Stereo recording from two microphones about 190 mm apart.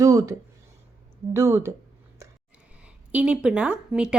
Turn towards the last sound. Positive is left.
turn(degrees=-5)  # may be behind; listen again after turning